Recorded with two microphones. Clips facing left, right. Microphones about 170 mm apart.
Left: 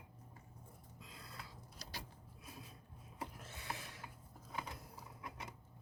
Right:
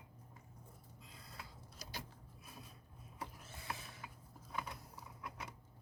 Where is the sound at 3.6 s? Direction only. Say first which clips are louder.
Even; 85° left.